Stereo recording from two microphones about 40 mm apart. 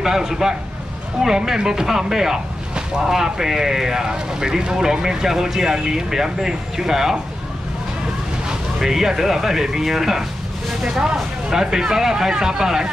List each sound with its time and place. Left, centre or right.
0.0 s speech: centre
8.5 s speech: centre